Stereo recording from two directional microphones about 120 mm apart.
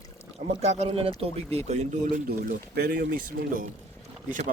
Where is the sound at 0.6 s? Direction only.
65° right (ahead or behind).